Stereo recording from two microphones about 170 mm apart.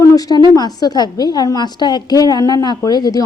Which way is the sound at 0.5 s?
25° left (ahead or behind).